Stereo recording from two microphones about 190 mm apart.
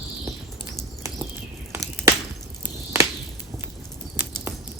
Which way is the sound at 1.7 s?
15° right (ahead or behind).